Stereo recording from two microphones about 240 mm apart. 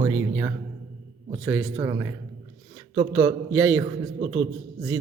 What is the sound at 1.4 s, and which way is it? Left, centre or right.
A man's voice, centre.